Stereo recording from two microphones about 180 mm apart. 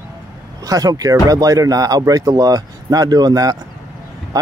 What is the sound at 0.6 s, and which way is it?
Speech, 20° right (ahead or behind).